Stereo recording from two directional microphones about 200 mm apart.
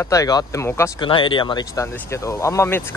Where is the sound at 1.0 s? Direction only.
25° left (ahead or behind).